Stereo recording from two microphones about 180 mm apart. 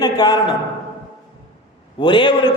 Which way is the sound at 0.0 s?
25° left (ahead or behind).